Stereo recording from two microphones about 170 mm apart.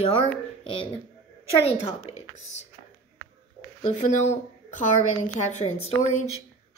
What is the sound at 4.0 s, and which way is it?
A woman's voice, 45° left (ahead or behind).